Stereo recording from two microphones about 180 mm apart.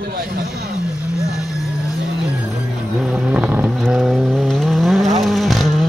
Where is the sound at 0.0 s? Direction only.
60° right (ahead or behind).